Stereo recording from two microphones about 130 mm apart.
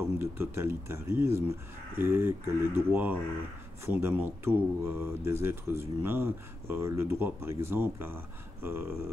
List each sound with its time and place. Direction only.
0.2 s speech: 15° right (ahead or behind)